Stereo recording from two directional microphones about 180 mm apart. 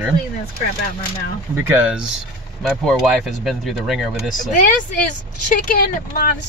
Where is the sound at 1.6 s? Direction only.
10° right (ahead or behind).